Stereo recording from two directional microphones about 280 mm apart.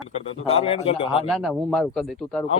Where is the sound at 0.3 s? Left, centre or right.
Left.